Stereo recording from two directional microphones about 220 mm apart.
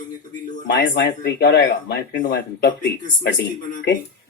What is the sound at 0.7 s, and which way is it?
Speech, 45° left (ahead or behind).